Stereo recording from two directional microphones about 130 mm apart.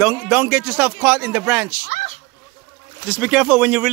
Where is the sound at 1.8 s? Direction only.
60° left (ahead or behind).